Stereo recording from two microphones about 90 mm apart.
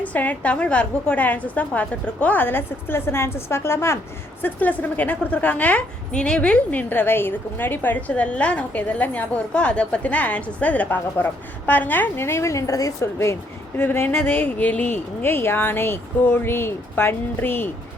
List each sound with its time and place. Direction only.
0.0 s a woman's voice: 15° left (ahead or behind)
4.4 s a woman's voice: 20° left (ahead or behind)